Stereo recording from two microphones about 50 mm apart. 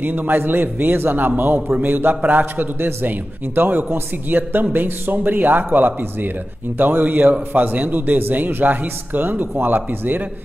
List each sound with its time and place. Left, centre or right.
0.0 s a man's voice: right